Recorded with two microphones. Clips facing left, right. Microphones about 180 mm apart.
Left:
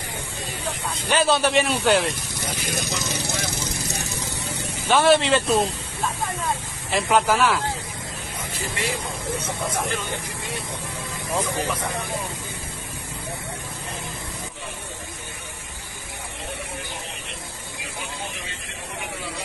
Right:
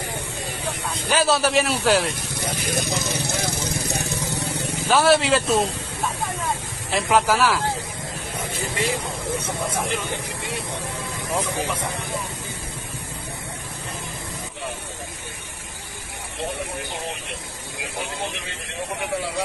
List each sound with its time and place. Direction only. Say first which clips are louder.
1.0 s a man's voice: even; 5° right (ahead or behind)
2.3 s vehicle: right 3 dB; 60° right (ahead or behind)
4.8 s a man's voice: even; 5° right (ahead or behind)
6.9 s a man's voice: even; centre (ahead or behind)
11.3 s speech: even; 10° right (ahead or behind)